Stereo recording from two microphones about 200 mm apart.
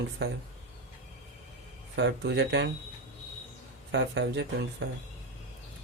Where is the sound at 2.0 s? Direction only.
60° right (ahead or behind).